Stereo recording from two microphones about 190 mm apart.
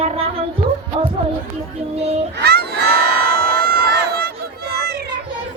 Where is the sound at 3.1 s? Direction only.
55° right (ahead or behind).